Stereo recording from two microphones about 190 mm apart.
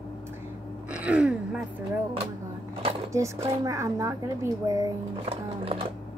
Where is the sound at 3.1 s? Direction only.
15° right (ahead or behind).